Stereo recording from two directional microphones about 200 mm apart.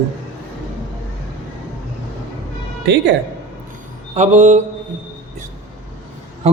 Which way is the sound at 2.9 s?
55° right (ahead or behind).